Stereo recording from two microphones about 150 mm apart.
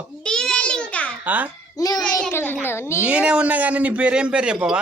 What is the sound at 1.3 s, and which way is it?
Speech, 10° right (ahead or behind).